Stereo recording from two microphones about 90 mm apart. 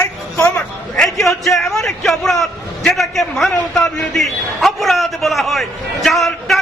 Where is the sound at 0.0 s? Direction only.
30° left (ahead or behind).